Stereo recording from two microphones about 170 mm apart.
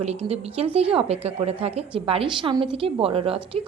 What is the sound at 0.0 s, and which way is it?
A woman's voice, 40° right (ahead or behind).